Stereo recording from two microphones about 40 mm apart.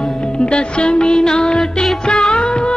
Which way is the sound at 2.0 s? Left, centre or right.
Left.